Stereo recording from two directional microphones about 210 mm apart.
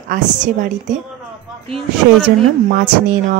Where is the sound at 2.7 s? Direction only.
45° right (ahead or behind).